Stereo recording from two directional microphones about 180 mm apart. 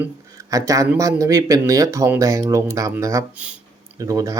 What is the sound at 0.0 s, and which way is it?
Speech, 20° right (ahead or behind).